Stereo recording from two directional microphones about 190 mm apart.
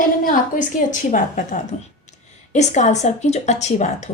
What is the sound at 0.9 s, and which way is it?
A woman's voice, 40° left (ahead or behind).